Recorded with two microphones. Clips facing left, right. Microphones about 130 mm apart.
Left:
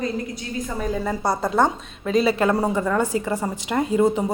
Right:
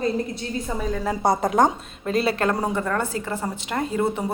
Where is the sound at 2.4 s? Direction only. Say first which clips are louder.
Left 3 dB; 5° left (ahead or behind).